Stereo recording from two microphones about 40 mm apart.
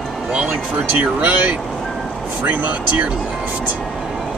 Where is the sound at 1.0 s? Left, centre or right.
Right.